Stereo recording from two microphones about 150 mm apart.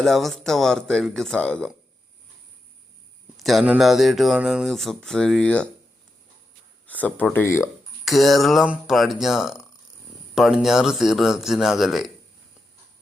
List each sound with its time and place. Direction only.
0.0 s speech: centre (ahead or behind)
3.3 s speech: centre (ahead or behind)
6.8 s a sound: 10° left (ahead or behind)
7.3 s speech: 15° left (ahead or behind)
8.0 s speech: centre (ahead or behind)